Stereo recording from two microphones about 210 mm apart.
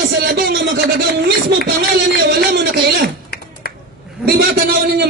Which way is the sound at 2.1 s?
50° right (ahead or behind).